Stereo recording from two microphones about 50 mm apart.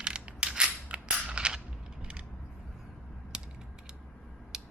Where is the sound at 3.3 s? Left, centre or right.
Centre.